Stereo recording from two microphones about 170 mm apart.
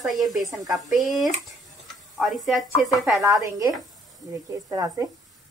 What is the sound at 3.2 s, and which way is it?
Speech, 20° right (ahead or behind).